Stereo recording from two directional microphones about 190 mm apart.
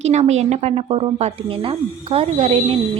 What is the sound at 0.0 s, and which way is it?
A woman's voice, 35° right (ahead or behind).